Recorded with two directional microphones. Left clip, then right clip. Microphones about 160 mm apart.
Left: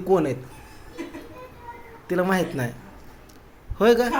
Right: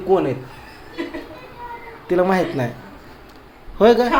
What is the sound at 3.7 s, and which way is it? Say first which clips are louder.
Speech: right 5 dB; centre (ahead or behind).